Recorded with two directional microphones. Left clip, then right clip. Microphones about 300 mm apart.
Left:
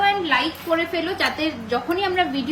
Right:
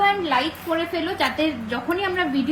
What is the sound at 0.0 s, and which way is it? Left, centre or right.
Speech, centre.